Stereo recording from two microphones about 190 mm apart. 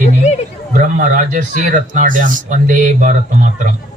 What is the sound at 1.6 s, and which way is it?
Speech, 45° right (ahead or behind).